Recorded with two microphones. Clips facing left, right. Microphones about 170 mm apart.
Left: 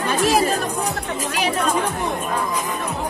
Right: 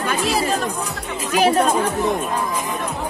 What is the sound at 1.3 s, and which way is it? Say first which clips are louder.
Speech: right 7 dB; 45° right (ahead or behind).